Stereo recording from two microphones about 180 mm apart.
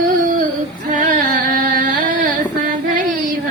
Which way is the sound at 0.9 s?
45° right (ahead or behind).